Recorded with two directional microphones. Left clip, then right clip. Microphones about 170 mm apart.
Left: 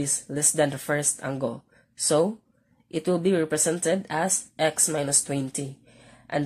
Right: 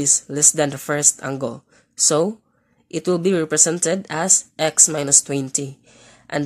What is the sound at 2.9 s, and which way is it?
Speech, 45° right (ahead or behind).